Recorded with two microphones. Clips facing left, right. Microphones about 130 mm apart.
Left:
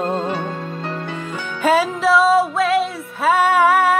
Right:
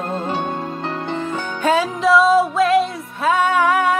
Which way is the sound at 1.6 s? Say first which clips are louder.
Left 1 dB; 5° left (ahead or behind).